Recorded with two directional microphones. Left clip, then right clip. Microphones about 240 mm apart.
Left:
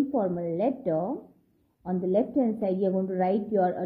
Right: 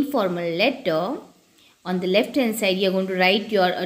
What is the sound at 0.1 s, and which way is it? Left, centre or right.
A woman's voice, right.